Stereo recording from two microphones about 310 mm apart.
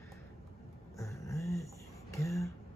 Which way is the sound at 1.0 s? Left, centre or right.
Centre.